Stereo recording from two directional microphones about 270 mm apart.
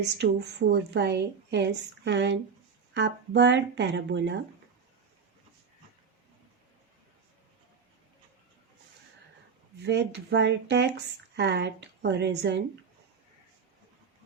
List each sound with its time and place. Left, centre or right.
0.2 s speech: right
9.8 s speech: right